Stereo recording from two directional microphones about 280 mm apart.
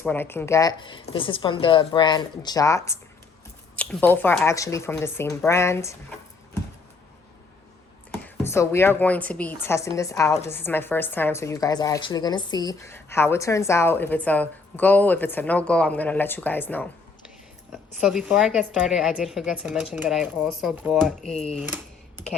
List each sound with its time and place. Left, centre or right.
0.0 s a woman's voice: centre
8.4 s a woman's voice: centre
18.0 s a woman's voice: centre